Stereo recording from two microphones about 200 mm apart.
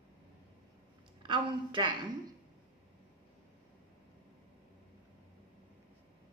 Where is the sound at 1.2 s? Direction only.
25° right (ahead or behind).